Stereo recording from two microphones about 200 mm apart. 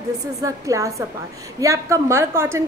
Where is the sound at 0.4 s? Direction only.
15° right (ahead or behind).